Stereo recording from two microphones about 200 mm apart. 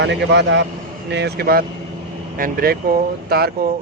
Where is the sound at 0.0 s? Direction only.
60° right (ahead or behind).